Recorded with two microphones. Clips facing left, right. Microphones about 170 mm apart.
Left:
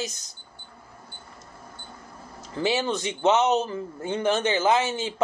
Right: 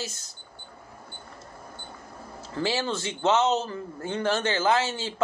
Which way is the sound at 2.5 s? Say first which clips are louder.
Left 3 dB; 15° left (ahead or behind).